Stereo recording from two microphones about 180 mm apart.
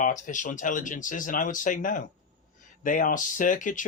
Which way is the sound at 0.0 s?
45° left (ahead or behind).